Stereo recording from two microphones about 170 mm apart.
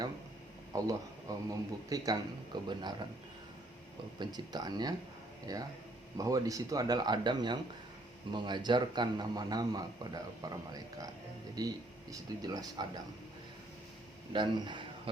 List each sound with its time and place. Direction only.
0.7 s a man's voice: 20° right (ahead or behind)
4.2 s a man's voice: 25° right (ahead or behind)
14.3 s a man's voice: 25° right (ahead or behind)